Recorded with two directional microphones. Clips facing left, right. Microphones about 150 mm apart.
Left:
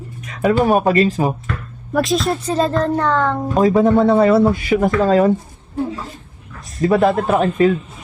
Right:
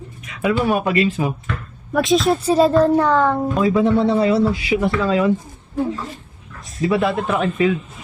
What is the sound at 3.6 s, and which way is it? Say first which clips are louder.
Speech: left 4 dB; 40° left (ahead or behind).